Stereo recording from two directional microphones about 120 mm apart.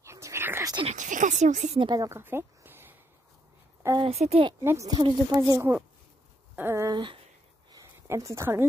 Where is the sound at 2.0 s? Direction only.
20° right (ahead or behind).